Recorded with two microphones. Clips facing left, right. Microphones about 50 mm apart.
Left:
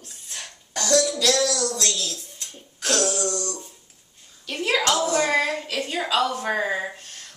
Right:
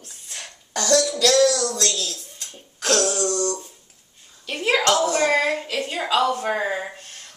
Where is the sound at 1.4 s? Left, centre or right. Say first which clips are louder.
Right 5 dB; right.